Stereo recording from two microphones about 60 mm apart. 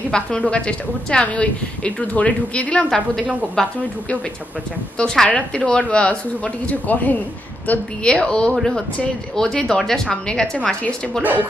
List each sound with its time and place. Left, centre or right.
0.1 s a woman's voice: centre
3.6 s a woman's voice: centre
4.9 s a woman's voice: centre
8.0 s a woman's voice: centre